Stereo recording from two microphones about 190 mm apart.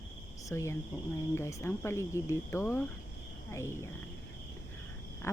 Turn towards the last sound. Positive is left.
turn(degrees=15)  # may be behind; listen again after turning